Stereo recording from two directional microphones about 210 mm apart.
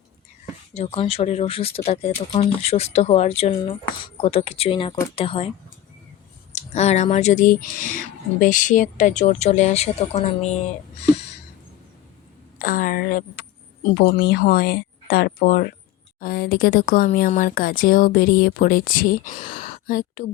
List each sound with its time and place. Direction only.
0.7 s speech: 30° left (ahead or behind)
6.5 s speech: 30° left (ahead or behind)
12.5 s speech: 40° left (ahead or behind)
19.5 s a sound: 30° left (ahead or behind)
19.9 s speech: 40° left (ahead or behind)